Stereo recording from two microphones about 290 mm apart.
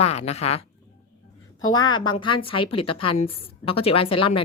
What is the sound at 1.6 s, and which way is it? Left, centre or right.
Speech, left.